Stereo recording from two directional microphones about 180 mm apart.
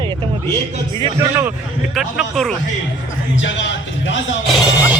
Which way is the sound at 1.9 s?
Centre (ahead or behind).